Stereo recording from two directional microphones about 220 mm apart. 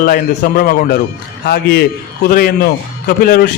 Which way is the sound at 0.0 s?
40° left (ahead or behind).